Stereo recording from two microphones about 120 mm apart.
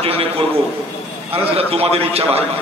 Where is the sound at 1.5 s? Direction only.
55° right (ahead or behind).